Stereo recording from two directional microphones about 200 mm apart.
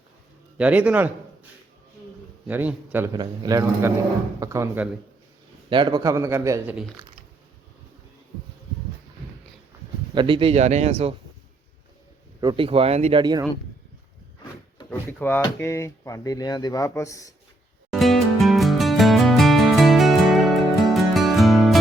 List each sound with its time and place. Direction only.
0.5 s a man's voice: 5° right (ahead or behind)
2.5 s a man's voice: 10° right (ahead or behind)
5.6 s a man's voice: 25° right (ahead or behind)
10.2 s a man's voice: 25° right (ahead or behind)
12.4 s speech: 25° right (ahead or behind)
14.8 s speech: 10° left (ahead or behind)
17.9 s music: centre (ahead or behind)